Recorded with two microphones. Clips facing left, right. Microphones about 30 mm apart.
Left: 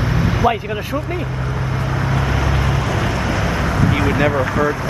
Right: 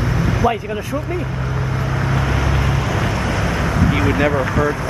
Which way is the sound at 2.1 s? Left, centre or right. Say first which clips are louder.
Even; centre.